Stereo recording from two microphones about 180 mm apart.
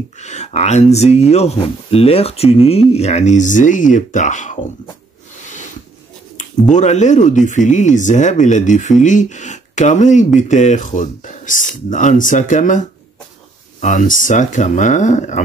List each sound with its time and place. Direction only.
0.2 s speech: 40° left (ahead or behind)
6.7 s speech: 40° left (ahead or behind)